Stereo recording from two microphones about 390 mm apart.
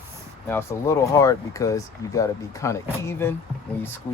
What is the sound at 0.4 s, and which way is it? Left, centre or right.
Speech, centre.